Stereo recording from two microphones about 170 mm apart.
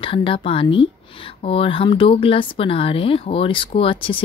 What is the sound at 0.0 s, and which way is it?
A woman's voice, 30° left (ahead or behind).